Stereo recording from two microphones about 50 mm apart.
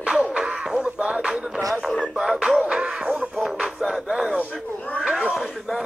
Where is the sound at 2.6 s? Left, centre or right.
Centre.